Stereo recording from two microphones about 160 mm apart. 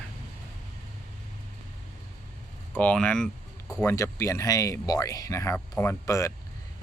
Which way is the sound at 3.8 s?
15° left (ahead or behind).